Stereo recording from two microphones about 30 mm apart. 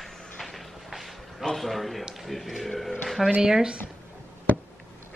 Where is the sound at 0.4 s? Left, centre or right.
Centre.